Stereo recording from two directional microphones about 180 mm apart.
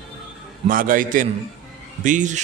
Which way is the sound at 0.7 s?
50° right (ahead or behind).